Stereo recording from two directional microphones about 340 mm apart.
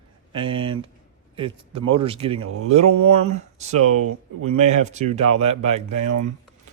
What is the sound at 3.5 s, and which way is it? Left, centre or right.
Speech, centre.